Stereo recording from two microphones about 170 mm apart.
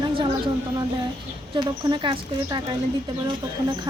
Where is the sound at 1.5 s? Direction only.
25° right (ahead or behind).